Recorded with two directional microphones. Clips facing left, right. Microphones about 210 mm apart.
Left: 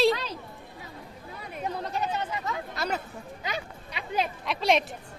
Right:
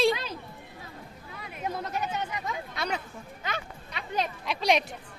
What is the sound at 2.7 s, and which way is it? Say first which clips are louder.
Speech: left 1 dB; 5° left (ahead or behind).